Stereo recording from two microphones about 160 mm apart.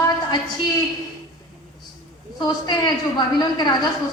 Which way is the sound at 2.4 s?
25° left (ahead or behind).